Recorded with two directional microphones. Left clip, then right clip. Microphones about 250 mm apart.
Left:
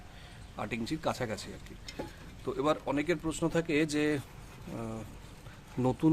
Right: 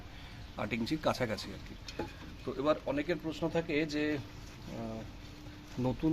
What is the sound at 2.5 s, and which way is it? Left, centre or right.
Speech, centre.